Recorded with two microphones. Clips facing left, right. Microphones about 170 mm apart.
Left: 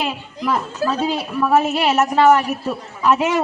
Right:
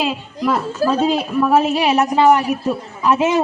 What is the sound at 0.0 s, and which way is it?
A man's voice, 5° right (ahead or behind).